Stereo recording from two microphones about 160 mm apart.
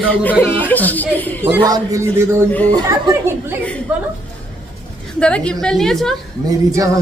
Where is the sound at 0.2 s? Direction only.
10° left (ahead or behind).